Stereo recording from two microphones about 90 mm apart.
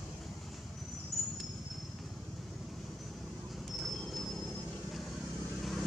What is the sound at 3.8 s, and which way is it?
Wind chime, centre (ahead or behind).